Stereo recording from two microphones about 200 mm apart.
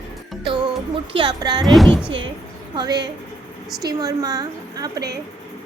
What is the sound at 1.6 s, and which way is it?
Speech, centre (ahead or behind).